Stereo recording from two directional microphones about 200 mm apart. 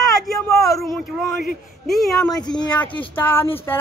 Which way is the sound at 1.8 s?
Centre (ahead or behind).